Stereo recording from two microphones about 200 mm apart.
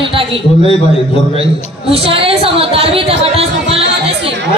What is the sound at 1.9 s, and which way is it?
A woman's voice, 30° right (ahead or behind).